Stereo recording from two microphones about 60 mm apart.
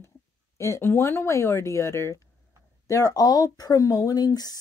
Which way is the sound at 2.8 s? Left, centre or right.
Left.